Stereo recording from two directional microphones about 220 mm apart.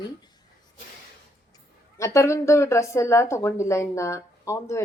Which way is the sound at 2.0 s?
15° left (ahead or behind).